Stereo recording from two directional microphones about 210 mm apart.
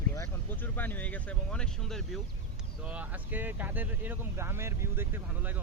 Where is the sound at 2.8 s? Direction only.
5° right (ahead or behind).